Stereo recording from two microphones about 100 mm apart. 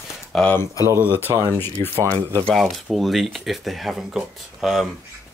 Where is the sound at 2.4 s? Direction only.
Centre (ahead or behind).